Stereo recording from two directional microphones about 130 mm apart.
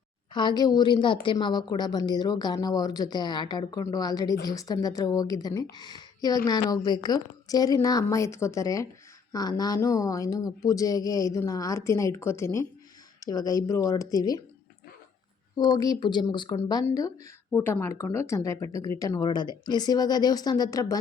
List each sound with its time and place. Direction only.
0.3 s a woman's voice: 35° left (ahead or behind)
15.5 s a woman's voice: 35° left (ahead or behind)
17.5 s a woman's voice: 15° left (ahead or behind)